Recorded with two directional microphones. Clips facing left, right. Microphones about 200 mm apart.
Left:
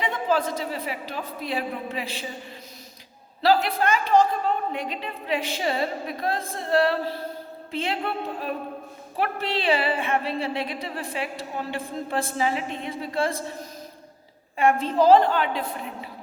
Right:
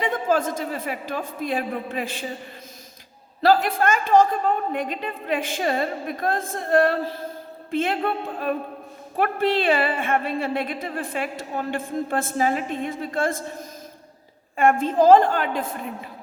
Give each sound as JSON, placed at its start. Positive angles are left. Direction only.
{"t": 0.0, "sound": "a woman's voice", "side_deg": -45}
{"t": 3.4, "sound": "a woman's voice", "side_deg": -50}